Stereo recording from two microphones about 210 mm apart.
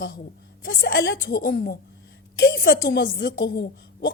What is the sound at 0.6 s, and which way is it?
A woman's voice, 50° left (ahead or behind).